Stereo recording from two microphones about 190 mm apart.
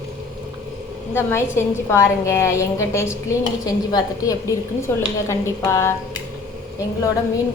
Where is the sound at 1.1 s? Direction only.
15° left (ahead or behind).